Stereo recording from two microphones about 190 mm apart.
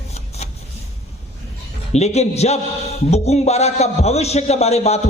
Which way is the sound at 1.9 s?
35° left (ahead or behind).